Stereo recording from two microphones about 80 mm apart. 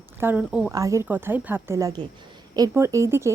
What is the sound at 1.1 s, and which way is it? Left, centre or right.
A woman's voice, right.